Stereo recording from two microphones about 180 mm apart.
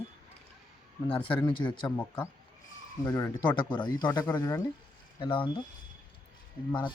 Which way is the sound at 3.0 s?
20° left (ahead or behind).